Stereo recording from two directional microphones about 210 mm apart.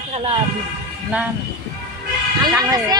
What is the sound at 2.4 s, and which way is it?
Speech, 15° right (ahead or behind).